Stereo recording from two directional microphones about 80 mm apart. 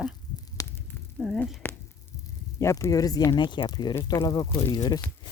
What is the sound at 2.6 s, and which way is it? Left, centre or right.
Speech, left.